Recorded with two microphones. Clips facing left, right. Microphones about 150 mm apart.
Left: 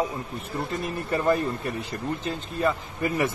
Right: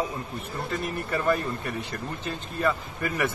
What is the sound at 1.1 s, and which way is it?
Speech, 25° left (ahead or behind).